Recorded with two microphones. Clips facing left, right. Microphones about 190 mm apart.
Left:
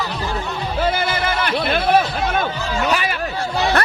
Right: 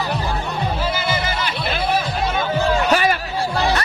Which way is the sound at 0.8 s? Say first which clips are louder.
Left 2 dB; 55° left (ahead or behind).